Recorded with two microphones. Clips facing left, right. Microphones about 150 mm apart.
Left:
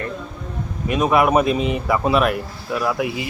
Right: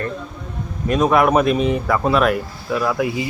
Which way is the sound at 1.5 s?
45° right (ahead or behind).